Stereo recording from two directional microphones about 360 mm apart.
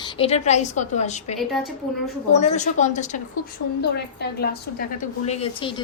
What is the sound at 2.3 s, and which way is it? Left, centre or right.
Speech, centre.